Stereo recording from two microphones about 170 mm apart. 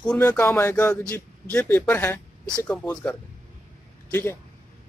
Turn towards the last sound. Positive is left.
turn(degrees=10)  # may be behind; listen again after turning